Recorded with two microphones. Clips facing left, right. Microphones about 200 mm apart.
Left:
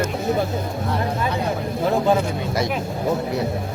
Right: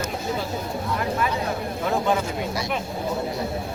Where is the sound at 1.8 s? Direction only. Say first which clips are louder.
Left 4 dB; 35° left (ahead or behind).